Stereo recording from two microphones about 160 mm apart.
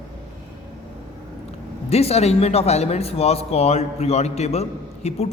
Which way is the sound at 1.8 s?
40° left (ahead or behind).